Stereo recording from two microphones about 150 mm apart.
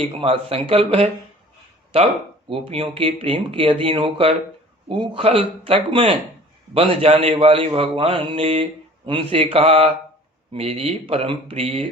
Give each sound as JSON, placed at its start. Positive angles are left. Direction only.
{"t": 0.0, "sound": "speech", "side_deg": -40}
{"t": 1.9, "sound": "speech", "side_deg": -40}